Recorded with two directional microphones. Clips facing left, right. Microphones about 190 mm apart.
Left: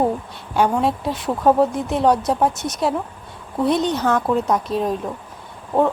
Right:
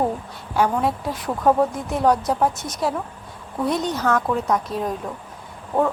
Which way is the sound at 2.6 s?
75° left (ahead or behind).